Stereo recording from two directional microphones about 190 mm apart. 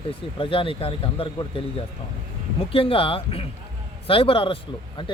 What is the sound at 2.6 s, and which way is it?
Speech, 30° left (ahead or behind).